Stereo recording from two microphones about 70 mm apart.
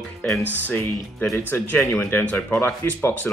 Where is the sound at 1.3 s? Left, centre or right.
Left.